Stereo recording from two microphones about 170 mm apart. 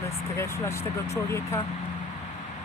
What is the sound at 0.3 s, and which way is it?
Speech, 15° left (ahead or behind).